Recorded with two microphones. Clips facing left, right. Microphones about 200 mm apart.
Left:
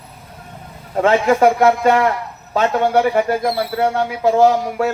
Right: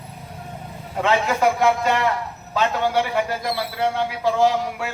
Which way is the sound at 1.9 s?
65° left (ahead or behind).